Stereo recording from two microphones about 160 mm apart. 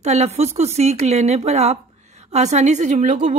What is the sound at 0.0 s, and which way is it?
A woman's voice, 45° right (ahead or behind).